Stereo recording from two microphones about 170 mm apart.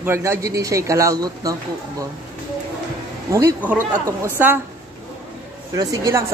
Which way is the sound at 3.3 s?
20° right (ahead or behind).